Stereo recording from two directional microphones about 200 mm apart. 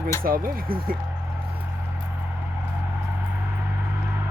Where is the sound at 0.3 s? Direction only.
45° right (ahead or behind).